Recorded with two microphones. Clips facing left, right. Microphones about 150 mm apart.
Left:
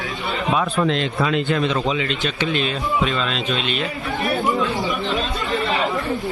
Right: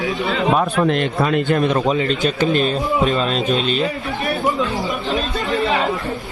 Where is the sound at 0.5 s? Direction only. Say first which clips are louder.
Right 3 dB; 50° right (ahead or behind).